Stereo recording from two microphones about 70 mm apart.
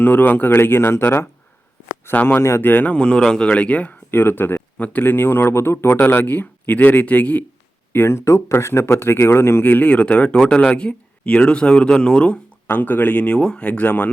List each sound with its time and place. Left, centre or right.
0.0 s speech: left
2.6 s speech: left
7.9 s speech: left; by 12.4 s centre
12.6 s speech: left